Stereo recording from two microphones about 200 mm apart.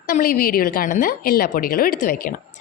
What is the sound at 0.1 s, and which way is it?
A woman's voice, 45° left (ahead or behind).